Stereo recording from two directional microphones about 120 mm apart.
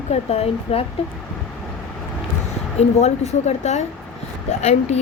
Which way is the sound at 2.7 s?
65° left (ahead or behind).